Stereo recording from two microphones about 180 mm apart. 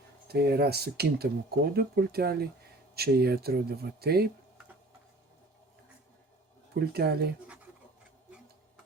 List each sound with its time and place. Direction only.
0.3 s speech: 60° right (ahead or behind)
6.7 s speech: 60° right (ahead or behind)